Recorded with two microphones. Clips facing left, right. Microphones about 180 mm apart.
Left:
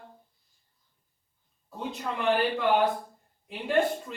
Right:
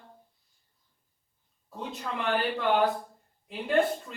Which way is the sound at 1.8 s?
Centre (ahead or behind).